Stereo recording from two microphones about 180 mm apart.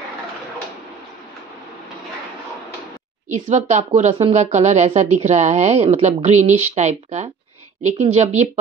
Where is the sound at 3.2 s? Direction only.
40° right (ahead or behind).